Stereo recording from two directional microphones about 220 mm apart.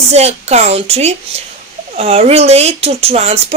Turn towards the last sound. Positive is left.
turn(degrees=-30)  # may be behind; listen again after turning